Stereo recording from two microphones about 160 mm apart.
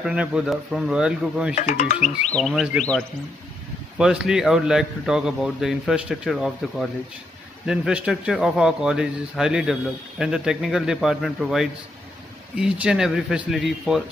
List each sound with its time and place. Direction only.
0.0 s a man's voice: 5° right (ahead or behind)
1.5 s speech: 50° left (ahead or behind)
2.3 s a man's voice: centre (ahead or behind)
4.0 s a man's voice: 5° right (ahead or behind)